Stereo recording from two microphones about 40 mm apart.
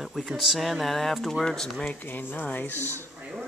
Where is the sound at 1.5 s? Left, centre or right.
Centre.